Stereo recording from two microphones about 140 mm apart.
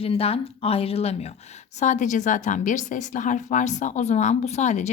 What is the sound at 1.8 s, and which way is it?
A woman's voice, 60° left (ahead or behind).